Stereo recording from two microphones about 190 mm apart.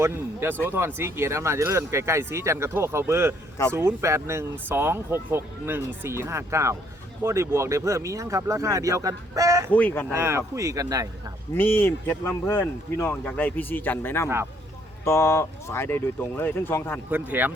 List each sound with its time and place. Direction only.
0.0 s speech: 15° right (ahead or behind)
9.7 s speech: 10° left (ahead or behind)
10.1 s speech: 15° right (ahead or behind)
11.5 s speech: 10° left (ahead or behind)
17.1 s speech: 10° right (ahead or behind)